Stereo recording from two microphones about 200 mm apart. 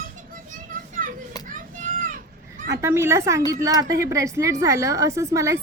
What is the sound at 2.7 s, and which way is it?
A woman's voice, 15° right (ahead or behind).